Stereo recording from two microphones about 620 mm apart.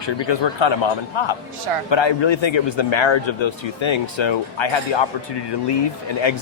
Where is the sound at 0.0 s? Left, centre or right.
Left.